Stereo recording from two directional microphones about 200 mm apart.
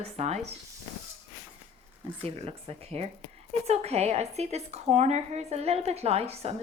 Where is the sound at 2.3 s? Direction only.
30° right (ahead or behind).